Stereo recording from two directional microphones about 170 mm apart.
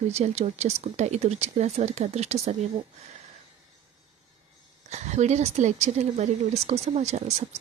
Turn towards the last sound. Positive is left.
turn(degrees=-40)  # may be behind; listen again after turning